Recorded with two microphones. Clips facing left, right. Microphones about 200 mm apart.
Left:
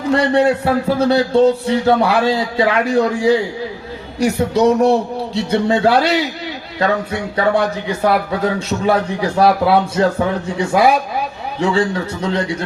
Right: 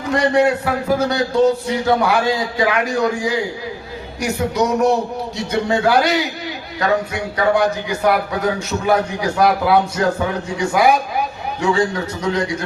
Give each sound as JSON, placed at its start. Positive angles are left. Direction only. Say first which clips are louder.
{"t": 0.1, "sound": "a man's voice", "louder": "left 1 dB", "side_deg": 30}